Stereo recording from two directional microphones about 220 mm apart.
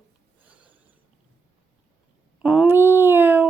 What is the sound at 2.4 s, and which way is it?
Speech, 5° right (ahead or behind).